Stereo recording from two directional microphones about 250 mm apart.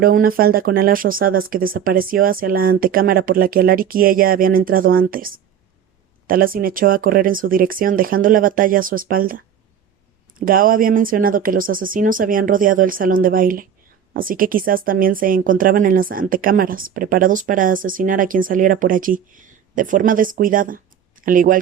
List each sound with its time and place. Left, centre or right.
0.0 s speech: right